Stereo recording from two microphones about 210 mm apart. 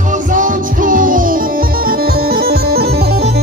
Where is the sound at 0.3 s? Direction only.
40° right (ahead or behind).